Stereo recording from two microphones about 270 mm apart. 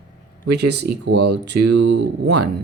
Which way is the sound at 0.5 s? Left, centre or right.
Right.